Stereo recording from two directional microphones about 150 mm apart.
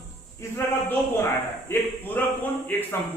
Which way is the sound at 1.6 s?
15° left (ahead or behind).